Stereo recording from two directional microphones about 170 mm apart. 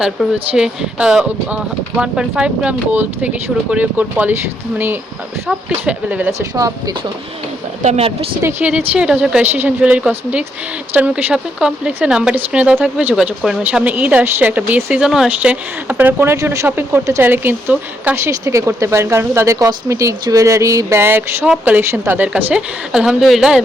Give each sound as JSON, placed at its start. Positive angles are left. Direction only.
{"t": 0.0, "sound": "speech", "side_deg": -5}
{"t": 5.5, "sound": "speech", "side_deg": -5}
{"t": 6.6, "sound": "speech", "side_deg": -20}
{"t": 7.8, "sound": "a woman's voice", "side_deg": -40}
{"t": 8.4, "sound": "speech", "side_deg": -10}